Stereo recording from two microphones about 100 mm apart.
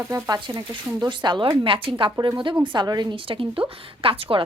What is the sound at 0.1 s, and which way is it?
A woman's voice, 45° right (ahead or behind).